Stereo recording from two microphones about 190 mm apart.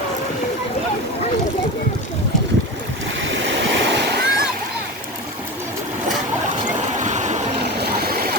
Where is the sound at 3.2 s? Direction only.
75° right (ahead or behind).